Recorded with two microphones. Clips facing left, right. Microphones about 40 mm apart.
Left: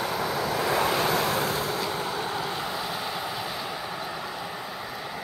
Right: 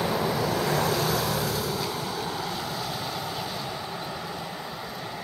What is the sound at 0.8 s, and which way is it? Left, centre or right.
Vehicle, left.